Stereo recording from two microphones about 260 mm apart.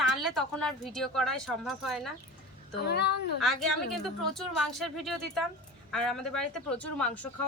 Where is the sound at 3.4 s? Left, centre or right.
Centre.